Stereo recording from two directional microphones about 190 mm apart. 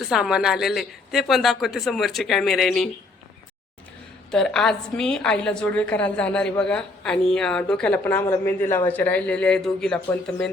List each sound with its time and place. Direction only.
0.0 s a woman's voice: centre (ahead or behind)
4.3 s a woman's voice: 5° left (ahead or behind)